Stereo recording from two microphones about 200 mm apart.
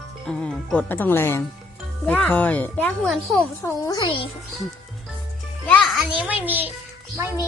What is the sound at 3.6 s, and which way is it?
Speech, 20° left (ahead or behind).